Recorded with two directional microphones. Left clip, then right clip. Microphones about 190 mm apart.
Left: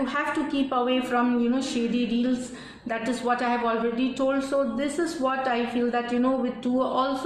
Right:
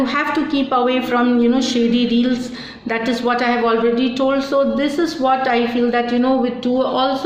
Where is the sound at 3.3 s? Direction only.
40° right (ahead or behind).